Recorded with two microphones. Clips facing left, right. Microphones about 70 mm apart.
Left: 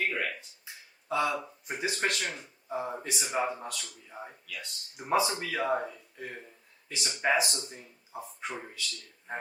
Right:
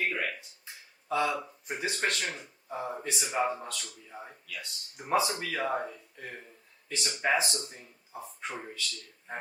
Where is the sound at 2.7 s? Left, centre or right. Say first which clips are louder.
Left 1 dB; centre.